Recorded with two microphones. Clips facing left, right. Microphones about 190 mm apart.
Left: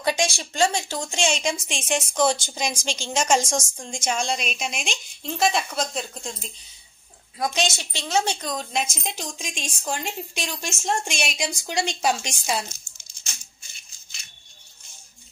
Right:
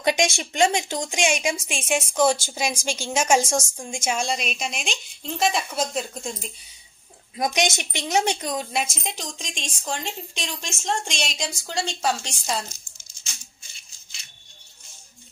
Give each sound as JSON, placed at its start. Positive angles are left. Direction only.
{"t": 0.0, "sound": "a woman's voice", "side_deg": -20}
{"t": 7.3, "sound": "a woman's voice", "side_deg": -20}
{"t": 9.0, "sound": "speech", "side_deg": 5}